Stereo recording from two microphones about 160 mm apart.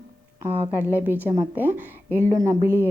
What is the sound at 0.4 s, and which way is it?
A woman's voice, 10° right (ahead or behind).